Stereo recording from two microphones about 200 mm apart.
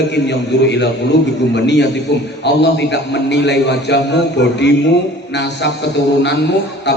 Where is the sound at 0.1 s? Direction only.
60° left (ahead or behind).